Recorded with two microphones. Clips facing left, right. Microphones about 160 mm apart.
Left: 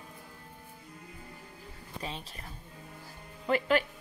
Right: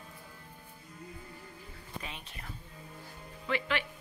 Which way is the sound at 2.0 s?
35° left (ahead or behind).